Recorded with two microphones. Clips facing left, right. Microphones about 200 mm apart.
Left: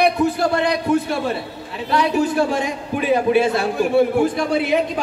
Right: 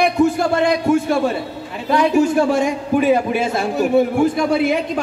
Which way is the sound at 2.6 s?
45° right (ahead or behind).